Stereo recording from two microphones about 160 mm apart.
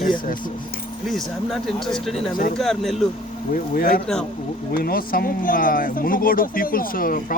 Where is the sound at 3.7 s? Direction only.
65° left (ahead or behind).